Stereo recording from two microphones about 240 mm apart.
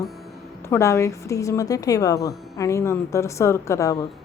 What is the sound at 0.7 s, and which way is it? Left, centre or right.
A woman's voice, centre.